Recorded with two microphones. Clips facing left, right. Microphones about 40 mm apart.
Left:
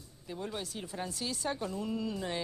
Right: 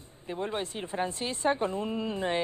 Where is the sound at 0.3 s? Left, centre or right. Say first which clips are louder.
Right 6 dB; right.